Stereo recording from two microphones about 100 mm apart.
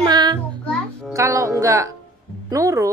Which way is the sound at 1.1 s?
30° right (ahead or behind).